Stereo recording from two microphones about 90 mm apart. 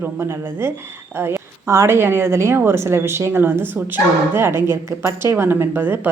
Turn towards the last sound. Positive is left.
turn(degrees=-20)  # may be behind; listen again after turning